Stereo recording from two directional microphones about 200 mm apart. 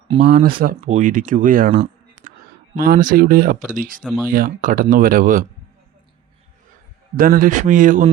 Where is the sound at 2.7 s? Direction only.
45° right (ahead or behind).